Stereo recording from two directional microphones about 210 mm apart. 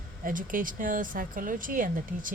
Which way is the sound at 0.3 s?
40° right (ahead or behind).